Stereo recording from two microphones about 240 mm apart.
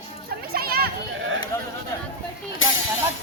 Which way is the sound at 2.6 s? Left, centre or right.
Left.